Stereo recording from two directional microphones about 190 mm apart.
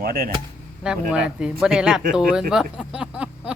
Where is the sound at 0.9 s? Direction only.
5° right (ahead or behind).